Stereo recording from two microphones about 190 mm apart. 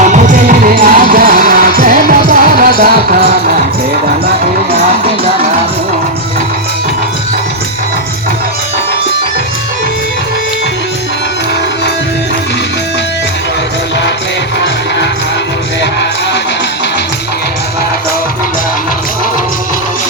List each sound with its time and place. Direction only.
0.0 s music: 40° right (ahead or behind)